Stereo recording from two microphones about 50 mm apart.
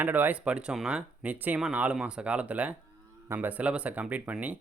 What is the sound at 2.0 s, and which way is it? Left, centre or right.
Speech, centre.